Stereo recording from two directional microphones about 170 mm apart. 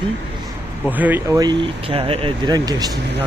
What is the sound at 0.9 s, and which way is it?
Speech, 10° right (ahead or behind).